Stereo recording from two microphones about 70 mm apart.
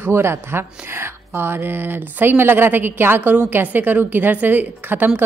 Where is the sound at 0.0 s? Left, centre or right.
Right.